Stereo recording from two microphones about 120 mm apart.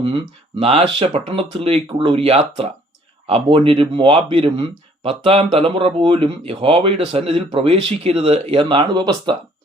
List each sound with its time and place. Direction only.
0.0 s speech: 50° right (ahead or behind)